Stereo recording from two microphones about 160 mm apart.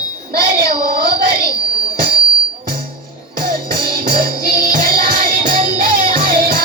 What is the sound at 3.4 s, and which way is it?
Music, 65° right (ahead or behind).